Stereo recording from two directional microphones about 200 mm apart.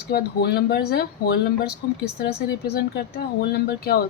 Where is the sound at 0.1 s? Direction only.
50° left (ahead or behind).